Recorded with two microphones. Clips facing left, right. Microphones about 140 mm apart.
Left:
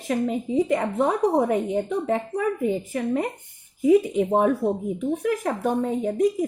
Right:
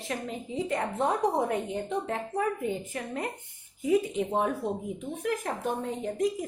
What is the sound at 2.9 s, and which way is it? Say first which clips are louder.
Speech: left 9 dB; 55° left (ahead or behind).